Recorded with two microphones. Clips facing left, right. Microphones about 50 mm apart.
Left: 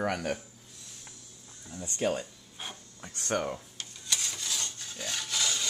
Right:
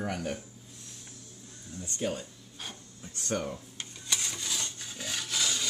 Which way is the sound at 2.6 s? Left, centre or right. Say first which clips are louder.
Left 1 dB; centre.